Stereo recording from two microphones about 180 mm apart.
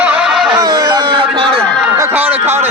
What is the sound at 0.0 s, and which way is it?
Music, 5° right (ahead or behind).